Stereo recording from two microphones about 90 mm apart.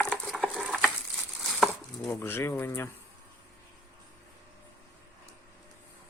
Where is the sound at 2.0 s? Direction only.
30° left (ahead or behind).